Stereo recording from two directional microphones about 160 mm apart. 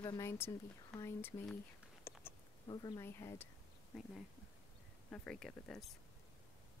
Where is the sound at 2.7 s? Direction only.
25° left (ahead or behind).